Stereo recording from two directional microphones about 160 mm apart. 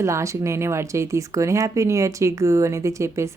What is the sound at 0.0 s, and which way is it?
A woman's voice, 20° right (ahead or behind).